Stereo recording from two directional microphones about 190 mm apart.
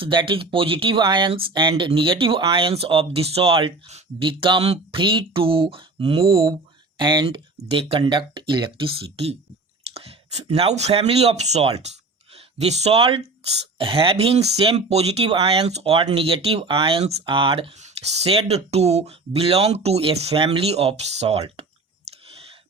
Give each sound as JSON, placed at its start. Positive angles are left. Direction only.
{"t": 0.0, "sound": "speech", "side_deg": -25}